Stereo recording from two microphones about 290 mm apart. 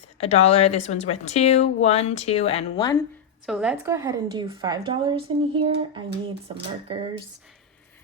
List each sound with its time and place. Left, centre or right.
0.2 s speech: left
3.4 s a woman's voice: centre